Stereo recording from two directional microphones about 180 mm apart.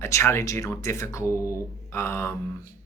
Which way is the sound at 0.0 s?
15° left (ahead or behind).